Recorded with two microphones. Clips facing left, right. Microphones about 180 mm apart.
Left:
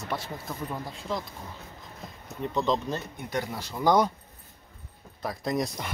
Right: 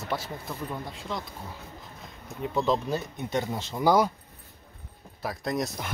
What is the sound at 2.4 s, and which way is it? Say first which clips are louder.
Speech: right 1 dB; 5° right (ahead or behind).